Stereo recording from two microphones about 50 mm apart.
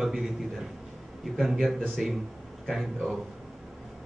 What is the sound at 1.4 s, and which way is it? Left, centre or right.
Speech, centre.